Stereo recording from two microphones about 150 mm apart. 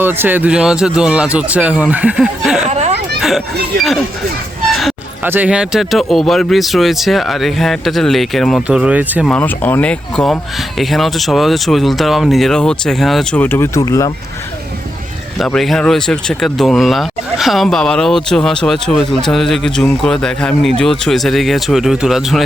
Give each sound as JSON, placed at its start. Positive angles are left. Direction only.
{"t": 0.0, "sound": "speech", "side_deg": -15}
{"t": 2.6, "sound": "children playing", "side_deg": -50}
{"t": 3.2, "sound": "a child's voice", "side_deg": 0}
{"t": 4.7, "sound": "a sound", "side_deg": 0}
{"t": 5.2, "sound": "speech", "side_deg": -10}
{"t": 8.6, "sound": "speech", "side_deg": -10}
{"t": 9.3, "sound": "speech", "side_deg": 10}
{"t": 13.4, "sound": "speech", "side_deg": 15}
{"t": 15.4, "sound": "speech", "side_deg": 0}